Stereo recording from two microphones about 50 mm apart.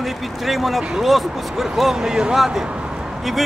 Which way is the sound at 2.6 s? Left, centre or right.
Centre.